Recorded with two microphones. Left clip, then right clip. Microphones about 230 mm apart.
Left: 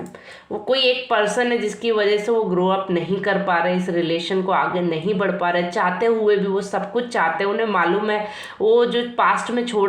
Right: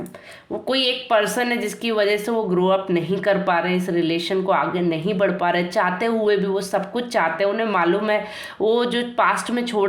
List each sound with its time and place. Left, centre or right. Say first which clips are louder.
0.7 s speech: left 1 dB; right